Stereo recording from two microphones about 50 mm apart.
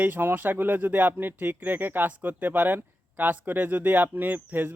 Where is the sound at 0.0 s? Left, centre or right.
Right.